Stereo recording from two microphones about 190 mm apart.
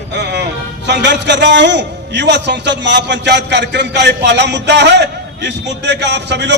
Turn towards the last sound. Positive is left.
turn(degrees=-65)  # may be behind; listen again after turning